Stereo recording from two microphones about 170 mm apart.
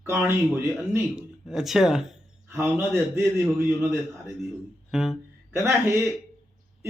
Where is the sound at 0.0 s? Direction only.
15° right (ahead or behind).